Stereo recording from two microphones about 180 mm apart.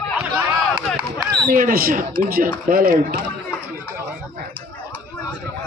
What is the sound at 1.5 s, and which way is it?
Speech, 50° right (ahead or behind).